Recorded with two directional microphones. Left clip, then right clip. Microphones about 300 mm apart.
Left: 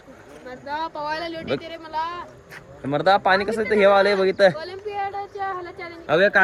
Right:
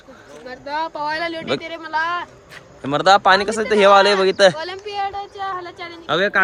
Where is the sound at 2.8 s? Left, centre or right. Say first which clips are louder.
Right 5 dB; centre.